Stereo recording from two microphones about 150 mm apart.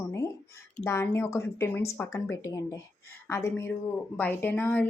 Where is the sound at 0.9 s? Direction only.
15° left (ahead or behind).